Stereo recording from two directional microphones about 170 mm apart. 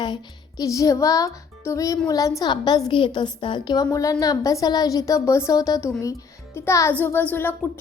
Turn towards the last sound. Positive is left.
turn(degrees=10)  # may be behind; listen again after turning